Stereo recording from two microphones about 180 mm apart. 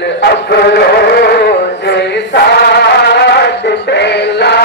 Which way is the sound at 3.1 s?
70° left (ahead or behind).